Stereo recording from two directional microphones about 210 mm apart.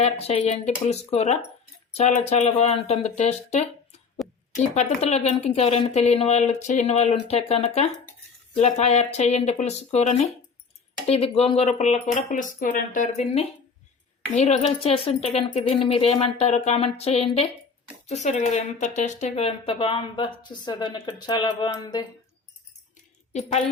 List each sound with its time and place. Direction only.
0.0 s speech: 30° left (ahead or behind)
4.2 s a woman's voice: centre (ahead or behind)
4.5 s speech: 35° left (ahead or behind)
14.4 s speech: 30° left (ahead or behind)
23.3 s speech: 30° left (ahead or behind)